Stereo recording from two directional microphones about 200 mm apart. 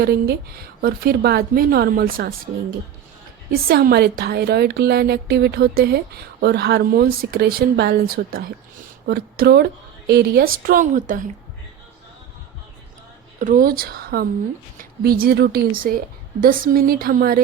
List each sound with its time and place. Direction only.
0.0 s speech: 50° right (ahead or behind)
3.5 s speech: 50° right (ahead or behind)
13.4 s speech: 45° right (ahead or behind)